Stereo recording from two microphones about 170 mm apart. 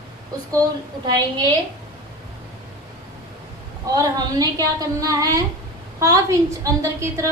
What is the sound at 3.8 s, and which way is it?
A woman's voice, 20° right (ahead or behind).